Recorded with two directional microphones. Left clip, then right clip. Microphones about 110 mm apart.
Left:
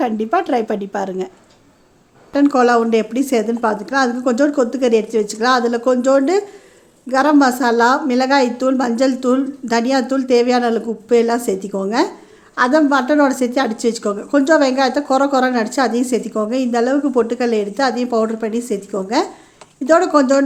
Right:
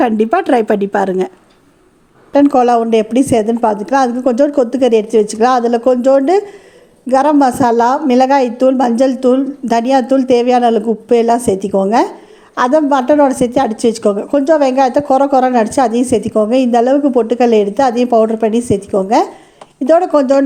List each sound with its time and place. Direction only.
0.0 s speech: 50° right (ahead or behind)
2.3 s a woman's voice: 30° right (ahead or behind)